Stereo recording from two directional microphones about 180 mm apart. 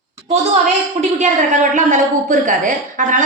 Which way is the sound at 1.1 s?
45° right (ahead or behind).